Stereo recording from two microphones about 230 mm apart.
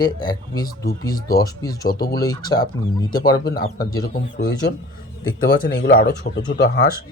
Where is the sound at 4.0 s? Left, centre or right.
Left.